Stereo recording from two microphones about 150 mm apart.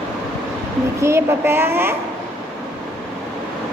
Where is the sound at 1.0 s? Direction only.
15° right (ahead or behind).